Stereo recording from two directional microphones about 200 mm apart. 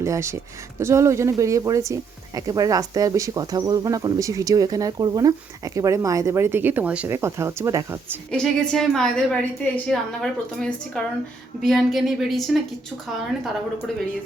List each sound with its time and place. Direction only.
0.0 s speech: 15° right (ahead or behind)
8.3 s a woman's voice: 5° left (ahead or behind)